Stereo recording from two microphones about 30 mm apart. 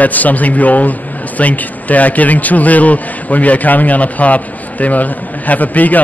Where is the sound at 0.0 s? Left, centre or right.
Left.